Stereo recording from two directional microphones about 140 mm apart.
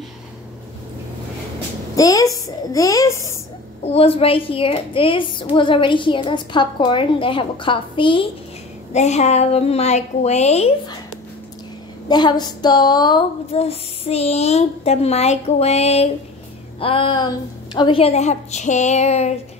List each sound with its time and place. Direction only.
2.0 s a woman's voice: 25° left (ahead or behind)
3.8 s a woman's voice: 45° left (ahead or behind)
8.9 s speech: 55° left (ahead or behind)
12.1 s a woman's voice: 30° left (ahead or behind)
13.6 s speech: 45° left (ahead or behind)
16.8 s a woman's voice: 40° left (ahead or behind)